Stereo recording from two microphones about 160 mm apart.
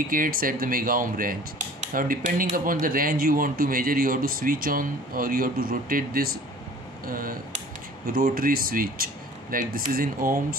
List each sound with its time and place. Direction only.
0.1 s speech: 60° right (ahead or behind)